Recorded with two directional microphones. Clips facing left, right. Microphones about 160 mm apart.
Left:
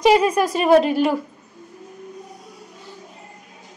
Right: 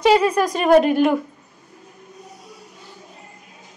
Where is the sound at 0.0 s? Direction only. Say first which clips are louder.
Even; 15° left (ahead or behind).